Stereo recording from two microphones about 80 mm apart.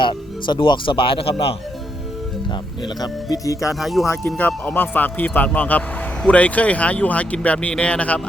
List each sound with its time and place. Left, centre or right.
0.0 s speech: left
3.0 s speech: left
3.8 s speech: centre
4.4 s speech: left